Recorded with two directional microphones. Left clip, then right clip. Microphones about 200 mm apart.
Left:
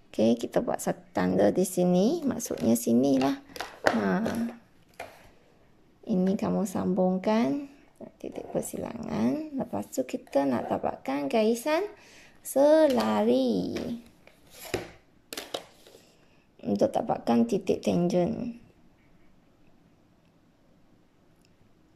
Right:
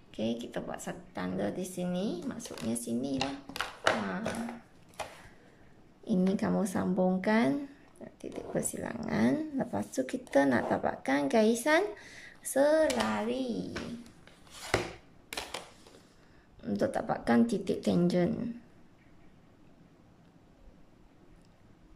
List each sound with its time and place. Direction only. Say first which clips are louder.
0.1 s speech: left 10 dB; 30° left (ahead or behind)
6.0 s a woman's voice: left 3 dB; 10° left (ahead or behind)
16.6 s a woman's voice: left 5 dB; 15° left (ahead or behind)